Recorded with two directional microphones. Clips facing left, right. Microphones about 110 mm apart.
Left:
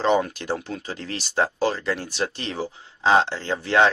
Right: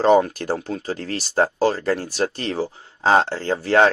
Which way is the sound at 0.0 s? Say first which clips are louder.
Right 5 dB; 40° right (ahead or behind).